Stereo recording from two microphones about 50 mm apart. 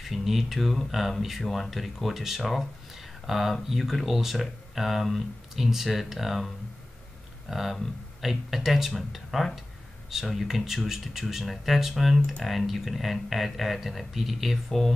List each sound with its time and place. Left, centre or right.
0.0 s speech: centre